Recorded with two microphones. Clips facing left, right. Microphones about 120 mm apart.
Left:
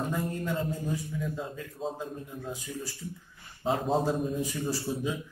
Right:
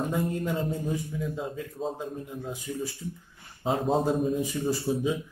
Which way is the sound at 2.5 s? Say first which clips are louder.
Right 4 dB; 15° right (ahead or behind).